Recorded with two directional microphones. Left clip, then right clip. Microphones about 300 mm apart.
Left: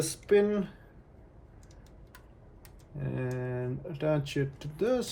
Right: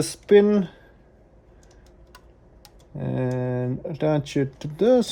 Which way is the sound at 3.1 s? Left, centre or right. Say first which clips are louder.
Right 9 dB; right.